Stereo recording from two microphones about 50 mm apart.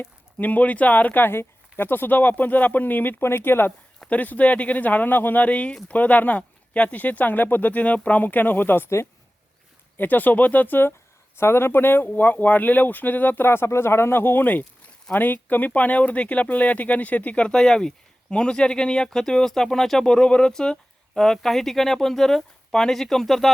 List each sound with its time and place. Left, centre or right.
0.3 s speech: left
1.3 s speech: left
3.2 s speech: left
4.1 s speech: left
8.2 s speech: left
10.0 s speech: left
11.3 s speech: left
13.5 s speech: left
17.5 s speech: centre